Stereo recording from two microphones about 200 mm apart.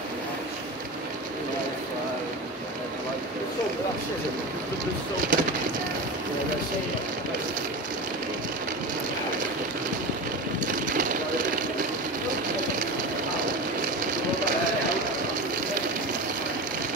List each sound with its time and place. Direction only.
5.3 s speech: 45° right (ahead or behind)
10.6 s vehicle: 40° right (ahead or behind)